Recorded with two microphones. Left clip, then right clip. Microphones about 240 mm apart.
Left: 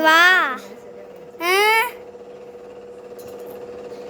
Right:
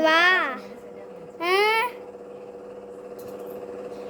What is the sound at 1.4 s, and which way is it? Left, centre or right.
Babbling, centre.